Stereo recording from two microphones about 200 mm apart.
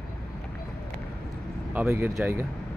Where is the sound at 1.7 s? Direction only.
10° right (ahead or behind).